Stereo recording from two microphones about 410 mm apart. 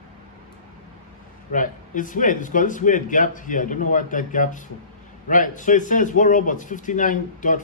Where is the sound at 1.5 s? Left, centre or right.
Centre.